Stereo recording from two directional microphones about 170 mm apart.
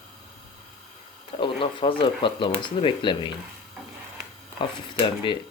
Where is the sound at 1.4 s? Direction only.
30° left (ahead or behind).